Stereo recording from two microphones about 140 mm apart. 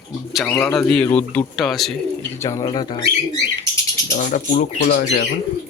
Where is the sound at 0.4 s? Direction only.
Centre (ahead or behind).